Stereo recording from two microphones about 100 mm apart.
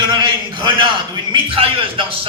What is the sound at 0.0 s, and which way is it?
A man's voice, 50° right (ahead or behind).